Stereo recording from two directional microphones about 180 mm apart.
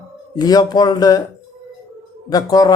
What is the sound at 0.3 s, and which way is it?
Speech, 20° left (ahead or behind).